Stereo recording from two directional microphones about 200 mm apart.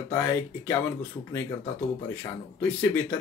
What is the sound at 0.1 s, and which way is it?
Speech, 10° left (ahead or behind).